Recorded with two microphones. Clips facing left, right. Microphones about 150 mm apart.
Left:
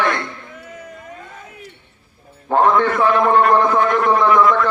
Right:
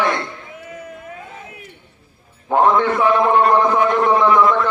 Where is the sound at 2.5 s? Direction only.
15° right (ahead or behind).